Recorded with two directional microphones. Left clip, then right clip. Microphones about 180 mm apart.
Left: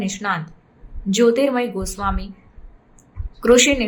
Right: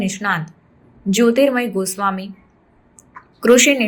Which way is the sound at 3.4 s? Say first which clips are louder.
Right 2 dB; 10° right (ahead or behind).